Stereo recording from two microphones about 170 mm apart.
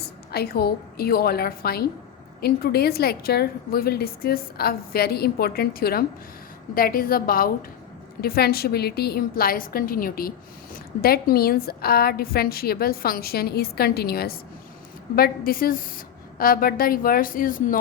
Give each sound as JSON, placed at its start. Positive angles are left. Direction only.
{"t": 0.3, "sound": "a woman's voice", "side_deg": 70}